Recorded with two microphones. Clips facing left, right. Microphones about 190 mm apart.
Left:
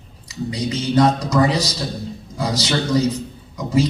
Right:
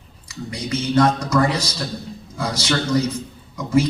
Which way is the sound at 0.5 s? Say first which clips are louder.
Left 1 dB; 15° left (ahead or behind).